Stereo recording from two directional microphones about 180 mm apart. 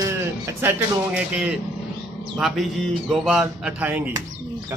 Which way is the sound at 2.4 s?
Centre (ahead or behind).